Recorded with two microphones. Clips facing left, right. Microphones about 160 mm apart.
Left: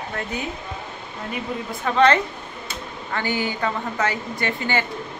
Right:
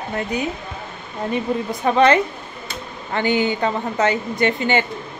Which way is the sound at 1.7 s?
15° right (ahead or behind).